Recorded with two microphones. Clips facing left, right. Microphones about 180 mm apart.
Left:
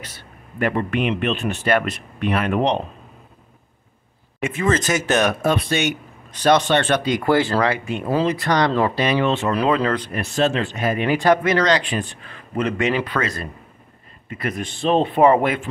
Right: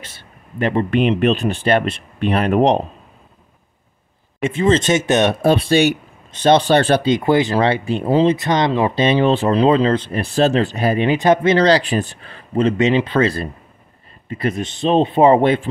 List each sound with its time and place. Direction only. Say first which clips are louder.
0.0 s speech: left 1 dB; 25° right (ahead or behind); by 2.8 s 40° right (ahead or behind)
4.4 s speech: right 5 dB; 30° right (ahead or behind)
7.1 s speech: right 3 dB; 20° right (ahead or behind)